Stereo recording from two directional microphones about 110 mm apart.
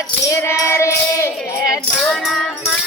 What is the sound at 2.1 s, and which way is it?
Music, 5° left (ahead or behind).